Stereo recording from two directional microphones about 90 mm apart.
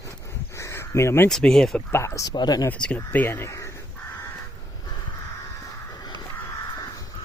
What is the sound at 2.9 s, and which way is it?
Speech, 20° left (ahead or behind).